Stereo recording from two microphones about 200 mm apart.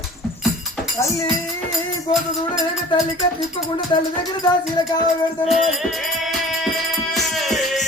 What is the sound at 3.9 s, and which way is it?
Music, 25° left (ahead or behind).